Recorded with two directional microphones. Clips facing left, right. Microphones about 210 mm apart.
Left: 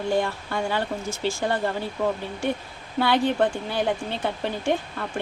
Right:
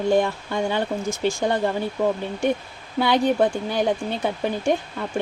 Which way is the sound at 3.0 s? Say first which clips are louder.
Right 2 dB; 15° right (ahead or behind).